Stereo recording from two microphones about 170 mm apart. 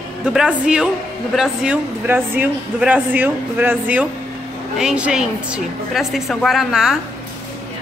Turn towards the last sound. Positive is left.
turn(degrees=0)  # may be behind; listen again after turning